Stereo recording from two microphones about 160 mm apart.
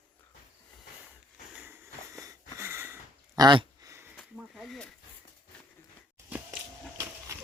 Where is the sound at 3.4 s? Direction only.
25° right (ahead or behind).